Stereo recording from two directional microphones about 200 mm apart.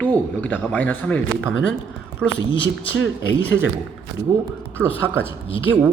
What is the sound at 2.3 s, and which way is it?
Speech, 25° left (ahead or behind).